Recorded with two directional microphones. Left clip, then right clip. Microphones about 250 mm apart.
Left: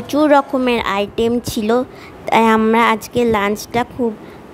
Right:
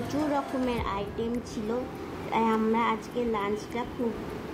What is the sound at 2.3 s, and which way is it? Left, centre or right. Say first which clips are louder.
A woman's voice: left 14 dB; left.